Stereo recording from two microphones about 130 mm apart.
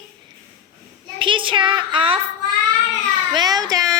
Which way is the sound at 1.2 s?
40° right (ahead or behind).